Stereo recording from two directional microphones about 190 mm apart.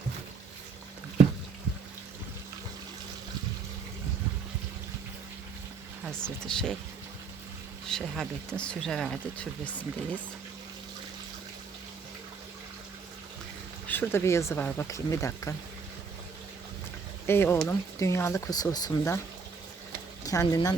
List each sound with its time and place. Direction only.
6.1 s speech: 5° left (ahead or behind)
7.9 s speech: centre (ahead or behind)
13.8 s speech: 10° left (ahead or behind)
17.2 s speech: 10° left (ahead or behind)
20.2 s speech: 20° left (ahead or behind)